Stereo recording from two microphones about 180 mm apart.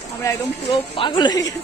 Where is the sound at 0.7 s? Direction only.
30° left (ahead or behind).